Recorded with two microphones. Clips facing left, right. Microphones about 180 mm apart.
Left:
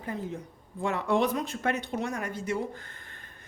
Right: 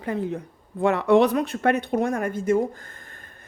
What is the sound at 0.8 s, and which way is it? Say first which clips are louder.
Speech: right 9 dB; 70° right (ahead or behind).